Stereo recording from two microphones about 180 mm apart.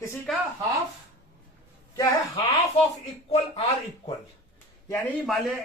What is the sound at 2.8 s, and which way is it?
Speech, 35° left (ahead or behind).